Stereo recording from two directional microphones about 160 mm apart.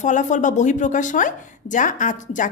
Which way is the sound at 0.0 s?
50° left (ahead or behind).